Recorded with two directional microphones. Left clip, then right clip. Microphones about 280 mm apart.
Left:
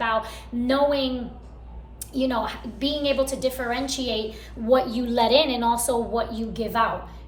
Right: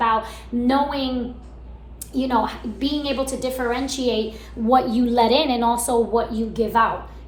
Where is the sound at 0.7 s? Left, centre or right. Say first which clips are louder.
Even; centre.